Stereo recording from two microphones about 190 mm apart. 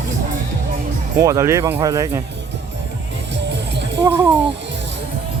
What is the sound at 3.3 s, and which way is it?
Music, 65° right (ahead or behind).